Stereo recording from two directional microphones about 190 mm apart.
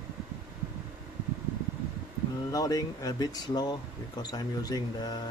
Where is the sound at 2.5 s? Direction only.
20° left (ahead or behind).